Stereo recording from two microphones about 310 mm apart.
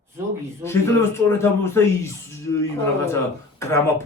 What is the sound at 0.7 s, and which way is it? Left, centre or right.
Speech, centre.